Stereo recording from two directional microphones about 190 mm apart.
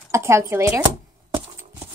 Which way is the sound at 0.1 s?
15° right (ahead or behind).